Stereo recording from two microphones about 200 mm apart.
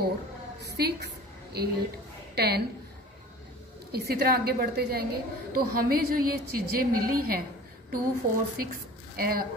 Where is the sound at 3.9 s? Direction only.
50° right (ahead or behind).